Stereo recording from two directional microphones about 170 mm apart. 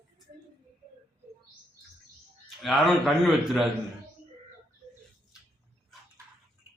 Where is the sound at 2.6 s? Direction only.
Centre (ahead or behind).